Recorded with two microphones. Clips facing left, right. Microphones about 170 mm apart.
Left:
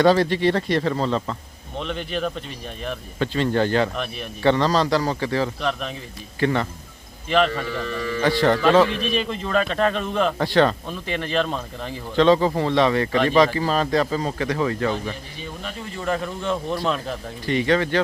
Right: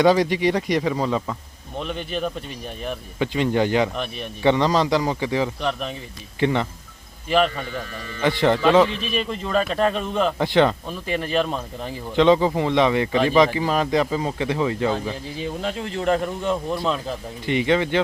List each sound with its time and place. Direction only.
0.0 s a man's voice: 15° right (ahead or behind)
3.9 s a man's voice: centre (ahead or behind)
4.4 s speech: 15° right (ahead or behind)
5.5 s a man's voice: centre (ahead or behind)
6.4 s speech: 20° right (ahead or behind)
7.3 s a man's voice: 5° right (ahead or behind)
8.2 s speech: 20° right (ahead or behind)
9.0 s a man's voice: 5° right (ahead or behind)
10.4 s speech: 20° right (ahead or behind)
10.8 s speech: 5° right (ahead or behind)
15.4 s speech: 90° right
16.4 s a man's voice: 10° right (ahead or behind)
17.4 s speech: 20° right (ahead or behind)